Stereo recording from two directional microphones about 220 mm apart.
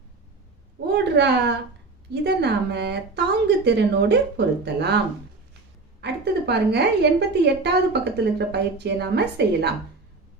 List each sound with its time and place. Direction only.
0.9 s a woman's voice: 50° right (ahead or behind)
6.0 s a woman's voice: 50° right (ahead or behind)